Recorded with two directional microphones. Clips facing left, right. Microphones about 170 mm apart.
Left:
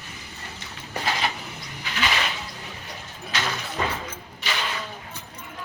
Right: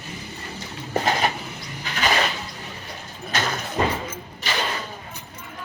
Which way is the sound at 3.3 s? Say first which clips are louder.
Right 3 dB; 45° right (ahead or behind).